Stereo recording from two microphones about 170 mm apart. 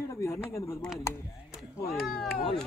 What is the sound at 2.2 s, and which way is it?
Speech, centre (ahead or behind).